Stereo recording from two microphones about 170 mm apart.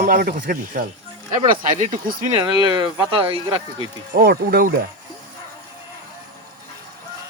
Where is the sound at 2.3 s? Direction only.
25° right (ahead or behind).